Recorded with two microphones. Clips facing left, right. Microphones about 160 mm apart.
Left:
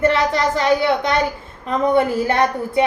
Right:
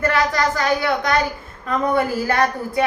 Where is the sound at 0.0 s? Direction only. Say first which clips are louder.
Left 2 dB; 25° left (ahead or behind).